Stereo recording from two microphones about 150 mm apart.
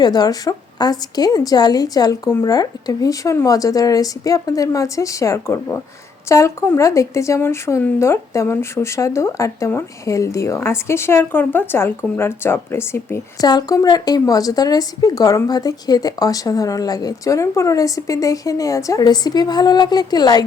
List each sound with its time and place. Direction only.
0.0 s speech: 25° left (ahead or behind)